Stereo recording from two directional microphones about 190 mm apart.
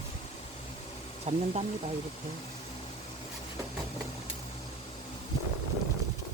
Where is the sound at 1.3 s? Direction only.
35° right (ahead or behind).